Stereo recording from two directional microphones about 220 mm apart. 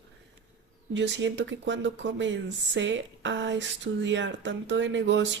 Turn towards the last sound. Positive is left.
turn(degrees=-55)  # may be behind; listen again after turning